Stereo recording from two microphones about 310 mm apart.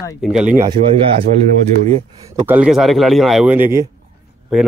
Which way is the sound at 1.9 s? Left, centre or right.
Centre.